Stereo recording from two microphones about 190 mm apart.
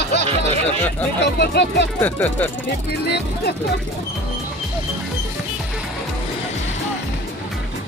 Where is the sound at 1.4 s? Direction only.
65° left (ahead or behind).